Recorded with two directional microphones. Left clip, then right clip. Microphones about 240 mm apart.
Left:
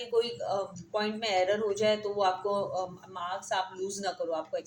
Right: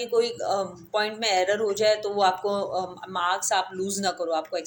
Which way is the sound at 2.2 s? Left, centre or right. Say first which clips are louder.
Right 5 dB; centre.